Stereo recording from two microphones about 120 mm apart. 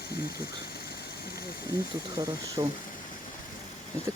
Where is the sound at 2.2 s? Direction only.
30° right (ahead or behind).